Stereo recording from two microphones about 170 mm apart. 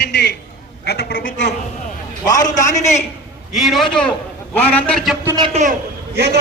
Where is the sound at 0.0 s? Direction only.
85° left.